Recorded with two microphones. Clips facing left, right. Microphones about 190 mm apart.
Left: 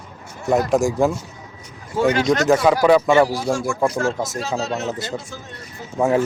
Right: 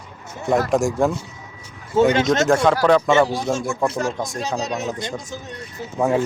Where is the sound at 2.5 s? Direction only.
5° left (ahead or behind).